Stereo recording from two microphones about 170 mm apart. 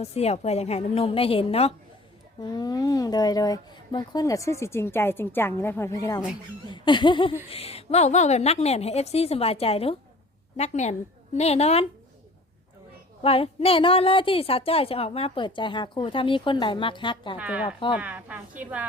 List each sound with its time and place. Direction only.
0.0 s a woman's voice: 40° left (ahead or behind)
2.4 s speech: 25° left (ahead or behind)
6.7 s a sound: 25° left (ahead or behind)
7.5 s a woman's voice: 35° left (ahead or behind)
13.2 s a woman's voice: 35° left (ahead or behind)
17.3 s a woman's voice: 5° right (ahead or behind)